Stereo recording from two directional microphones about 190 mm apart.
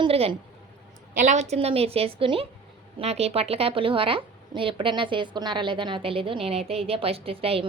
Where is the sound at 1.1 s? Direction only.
40° right (ahead or behind).